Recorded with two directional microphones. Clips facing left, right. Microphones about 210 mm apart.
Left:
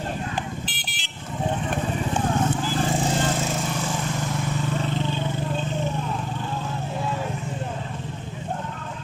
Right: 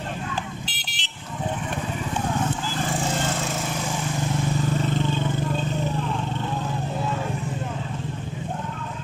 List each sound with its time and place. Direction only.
0.7 s car alarm: 50° left (ahead or behind)